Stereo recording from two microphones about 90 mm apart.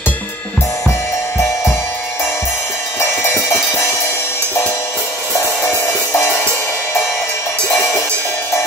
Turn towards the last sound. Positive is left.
turn(degrees=10)  # may be behind; listen again after turning